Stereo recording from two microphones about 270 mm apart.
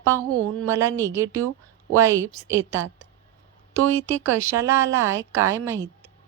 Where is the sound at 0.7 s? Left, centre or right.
Centre.